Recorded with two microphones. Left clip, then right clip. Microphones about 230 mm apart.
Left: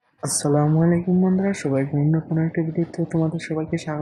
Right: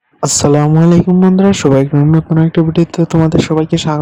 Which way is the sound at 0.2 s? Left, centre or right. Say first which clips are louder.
Right 10 dB; right.